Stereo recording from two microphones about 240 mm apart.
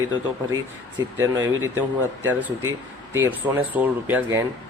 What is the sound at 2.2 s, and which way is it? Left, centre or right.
A man's voice, centre.